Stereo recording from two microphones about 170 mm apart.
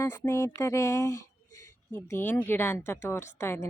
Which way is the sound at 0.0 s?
15° left (ahead or behind).